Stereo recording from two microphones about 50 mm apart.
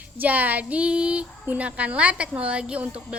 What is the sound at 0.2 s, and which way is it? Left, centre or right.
A woman's voice, right.